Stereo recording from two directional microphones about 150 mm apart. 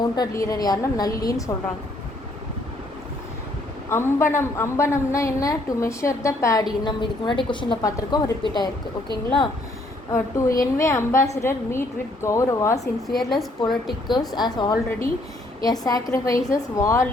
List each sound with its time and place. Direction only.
0.0 s a woman's voice: 25° left (ahead or behind)
3.8 s a woman's voice: 15° left (ahead or behind)
10.1 s a woman's voice: 20° left (ahead or behind)
13.1 s a woman's voice: centre (ahead or behind)
14.1 s a woman's voice: 25° left (ahead or behind)